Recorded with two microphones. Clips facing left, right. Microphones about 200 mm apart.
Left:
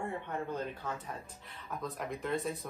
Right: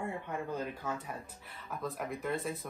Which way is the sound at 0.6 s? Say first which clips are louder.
Right 1 dB; 10° right (ahead or behind).